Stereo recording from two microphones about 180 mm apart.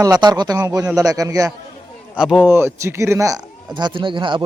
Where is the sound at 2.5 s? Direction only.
15° right (ahead or behind).